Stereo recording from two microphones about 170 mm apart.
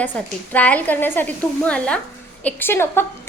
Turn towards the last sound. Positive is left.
turn(degrees=15)  # may be behind; listen again after turning